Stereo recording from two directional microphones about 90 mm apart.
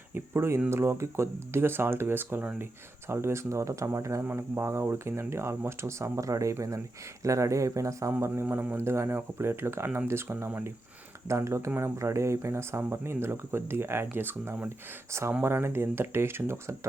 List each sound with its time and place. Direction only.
0.1 s speech: 30° right (ahead or behind)
4.2 s speech: 25° right (ahead or behind)